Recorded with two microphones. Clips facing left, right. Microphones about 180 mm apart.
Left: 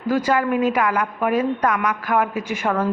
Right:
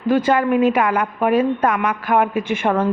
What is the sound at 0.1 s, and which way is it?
Speech, 25° right (ahead or behind).